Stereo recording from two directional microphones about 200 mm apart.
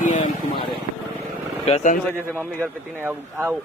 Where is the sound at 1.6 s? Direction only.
30° left (ahead or behind).